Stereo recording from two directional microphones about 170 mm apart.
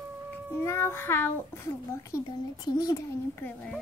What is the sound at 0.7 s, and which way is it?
A child's voice, 15° left (ahead or behind).